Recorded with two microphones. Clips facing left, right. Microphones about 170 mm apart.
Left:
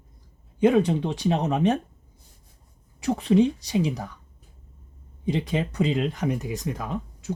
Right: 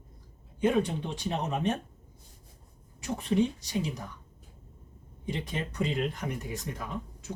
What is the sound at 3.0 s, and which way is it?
Speech, 90° left.